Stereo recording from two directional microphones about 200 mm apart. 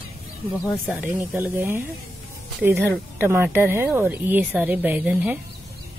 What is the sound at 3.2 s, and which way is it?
A woman's voice, 10° right (ahead or behind).